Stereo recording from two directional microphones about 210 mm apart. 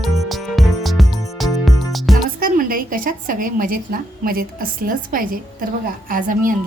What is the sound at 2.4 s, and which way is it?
A woman's voice, 40° right (ahead or behind).